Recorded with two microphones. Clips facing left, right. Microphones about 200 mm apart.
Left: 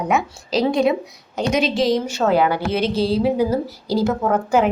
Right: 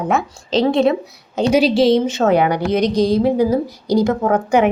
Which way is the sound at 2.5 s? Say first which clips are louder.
Right 4 dB; 5° left (ahead or behind).